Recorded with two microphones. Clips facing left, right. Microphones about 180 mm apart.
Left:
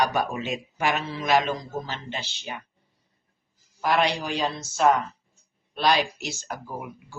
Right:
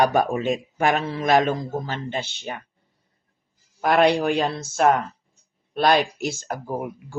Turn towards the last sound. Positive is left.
turn(degrees=-50)  # may be behind; listen again after turning